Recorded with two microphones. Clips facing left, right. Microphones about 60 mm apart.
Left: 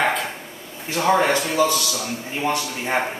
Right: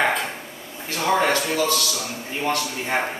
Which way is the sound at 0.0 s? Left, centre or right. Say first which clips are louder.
Even; centre.